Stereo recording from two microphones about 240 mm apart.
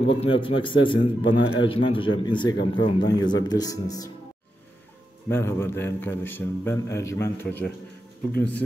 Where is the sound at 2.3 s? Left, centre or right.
Centre.